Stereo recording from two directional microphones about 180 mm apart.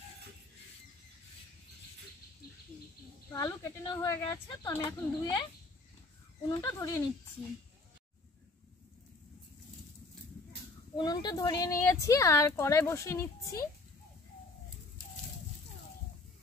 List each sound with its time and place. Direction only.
3.3 s speech: 20° left (ahead or behind)
6.5 s speech: 20° left (ahead or behind)
11.0 s speech: 25° left (ahead or behind)